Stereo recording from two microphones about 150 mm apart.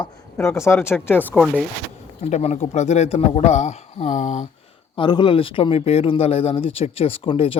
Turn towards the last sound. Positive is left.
turn(degrees=35)  # may be behind; listen again after turning